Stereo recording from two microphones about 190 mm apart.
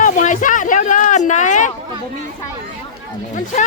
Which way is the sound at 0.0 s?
40° left (ahead or behind).